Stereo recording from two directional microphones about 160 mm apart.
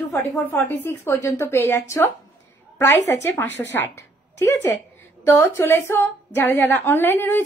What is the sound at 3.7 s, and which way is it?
A woman's voice, 10° left (ahead or behind).